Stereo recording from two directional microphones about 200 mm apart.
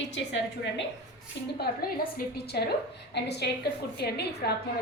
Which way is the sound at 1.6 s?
55° left (ahead or behind).